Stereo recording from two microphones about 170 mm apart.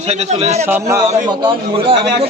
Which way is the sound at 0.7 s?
15° right (ahead or behind).